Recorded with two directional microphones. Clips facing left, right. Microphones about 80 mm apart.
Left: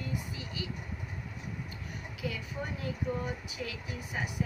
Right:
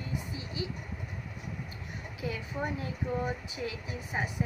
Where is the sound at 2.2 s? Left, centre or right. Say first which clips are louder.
Right 3 dB; right.